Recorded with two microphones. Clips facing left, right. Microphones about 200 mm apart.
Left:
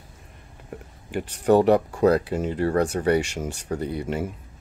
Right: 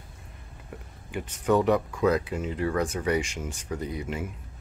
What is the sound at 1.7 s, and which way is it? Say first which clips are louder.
Speech: left 5 dB; 35° left (ahead or behind).